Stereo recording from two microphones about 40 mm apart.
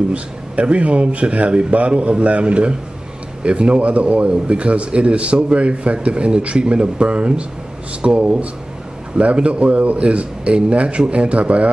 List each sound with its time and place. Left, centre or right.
0.1 s a man's voice: right